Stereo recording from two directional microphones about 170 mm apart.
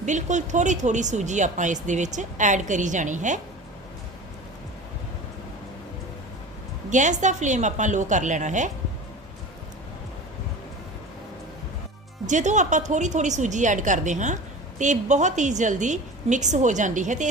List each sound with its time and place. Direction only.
0.0 s speech: 45° right (ahead or behind)
6.9 s speech: 45° right (ahead or behind)
12.2 s speech: 45° right (ahead or behind)